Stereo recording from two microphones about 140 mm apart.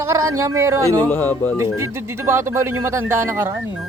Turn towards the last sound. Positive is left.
turn(degrees=-15)  # may be behind; listen again after turning